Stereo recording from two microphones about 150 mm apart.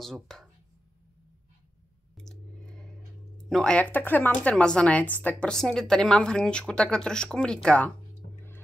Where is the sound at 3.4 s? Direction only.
5° left (ahead or behind).